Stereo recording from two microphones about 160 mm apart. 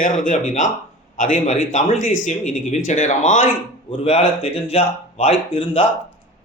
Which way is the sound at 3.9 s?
35° left (ahead or behind).